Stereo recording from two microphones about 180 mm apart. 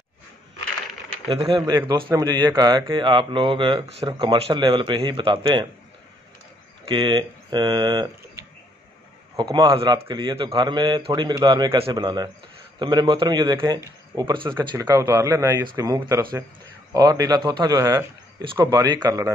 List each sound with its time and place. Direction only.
1.3 s a man's voice: 30° right (ahead or behind)
6.9 s a man's voice: 25° right (ahead or behind)